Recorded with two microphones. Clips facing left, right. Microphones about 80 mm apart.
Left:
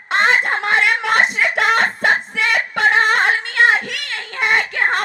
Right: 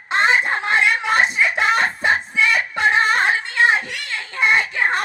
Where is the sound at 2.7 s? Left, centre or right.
Left.